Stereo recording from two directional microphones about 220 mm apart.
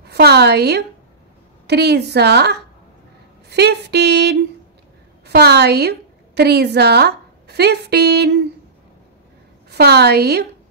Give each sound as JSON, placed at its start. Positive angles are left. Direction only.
{"t": 0.0, "sound": "a woman's voice", "side_deg": -45}
{"t": 9.7, "sound": "a woman's voice", "side_deg": -45}